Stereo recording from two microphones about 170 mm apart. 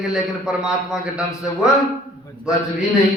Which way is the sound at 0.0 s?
Centre (ahead or behind).